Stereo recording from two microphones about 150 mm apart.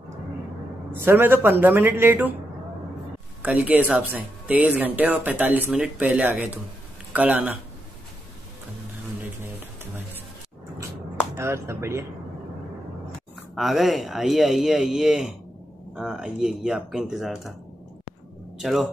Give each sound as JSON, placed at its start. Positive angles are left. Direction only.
{"t": 1.0, "sound": "speech", "side_deg": -15}
{"t": 3.4, "sound": "speech", "side_deg": -10}
{"t": 9.6, "sound": "a sound", "side_deg": -15}
{"t": 11.3, "sound": "speech", "side_deg": -20}
{"t": 13.6, "sound": "speech", "side_deg": 0}
{"t": 18.6, "sound": "speech", "side_deg": 0}